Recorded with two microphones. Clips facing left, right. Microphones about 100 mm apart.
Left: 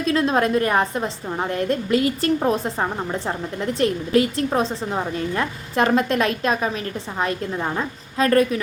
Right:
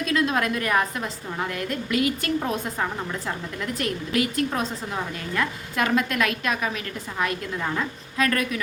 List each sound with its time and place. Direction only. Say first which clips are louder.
0.0 s a woman's voice: left 4 dB; 35° left (ahead or behind)